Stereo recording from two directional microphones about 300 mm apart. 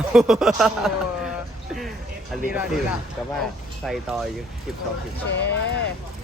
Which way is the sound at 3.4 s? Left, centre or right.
Centre.